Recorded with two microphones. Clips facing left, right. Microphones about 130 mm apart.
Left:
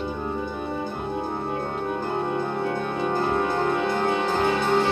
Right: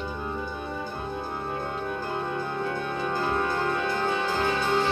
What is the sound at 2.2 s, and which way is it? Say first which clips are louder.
Music: left 4 dB; 30° left (ahead or behind).